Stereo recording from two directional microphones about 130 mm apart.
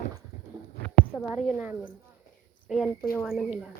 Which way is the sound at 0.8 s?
5° left (ahead or behind).